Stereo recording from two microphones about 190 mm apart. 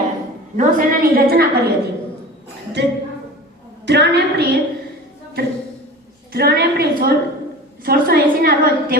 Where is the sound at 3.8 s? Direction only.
65° right (ahead or behind).